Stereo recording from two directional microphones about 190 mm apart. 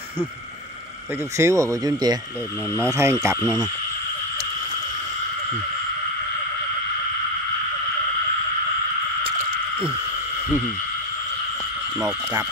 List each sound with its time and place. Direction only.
1.4 s speech: 15° right (ahead or behind)